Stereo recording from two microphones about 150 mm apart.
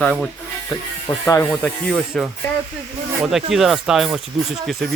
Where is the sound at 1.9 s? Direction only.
Centre (ahead or behind).